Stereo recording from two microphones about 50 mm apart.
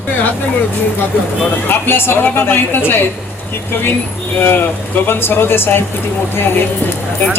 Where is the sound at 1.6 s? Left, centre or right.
Left.